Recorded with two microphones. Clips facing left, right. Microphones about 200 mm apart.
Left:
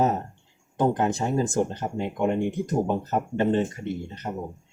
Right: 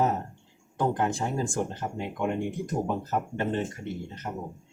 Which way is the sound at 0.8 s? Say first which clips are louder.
Left 4 dB; 20° left (ahead or behind).